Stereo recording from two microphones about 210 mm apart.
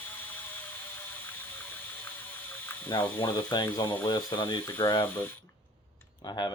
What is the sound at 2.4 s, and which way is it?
Ratchet, 10° left (ahead or behind).